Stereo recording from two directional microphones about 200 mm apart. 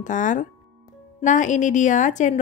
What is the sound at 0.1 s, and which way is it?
A woman's voice, 40° left (ahead or behind).